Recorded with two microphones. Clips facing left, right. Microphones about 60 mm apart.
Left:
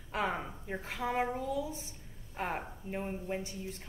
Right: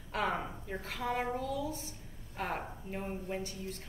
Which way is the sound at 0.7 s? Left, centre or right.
Centre.